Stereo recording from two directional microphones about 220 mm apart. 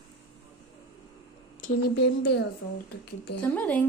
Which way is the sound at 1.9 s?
50° left (ahead or behind).